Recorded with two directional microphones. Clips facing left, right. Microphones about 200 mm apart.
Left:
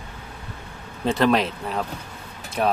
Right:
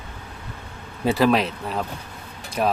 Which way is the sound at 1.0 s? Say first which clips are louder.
Right 1 dB; 5° right (ahead or behind).